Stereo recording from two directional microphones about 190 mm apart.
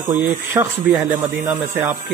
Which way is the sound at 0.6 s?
20° right (ahead or behind).